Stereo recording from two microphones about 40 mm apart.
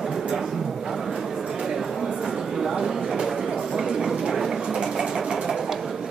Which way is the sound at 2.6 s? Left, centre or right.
Centre.